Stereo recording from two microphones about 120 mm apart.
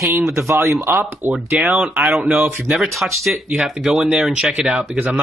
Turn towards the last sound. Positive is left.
turn(degrees=-10)  # may be behind; listen again after turning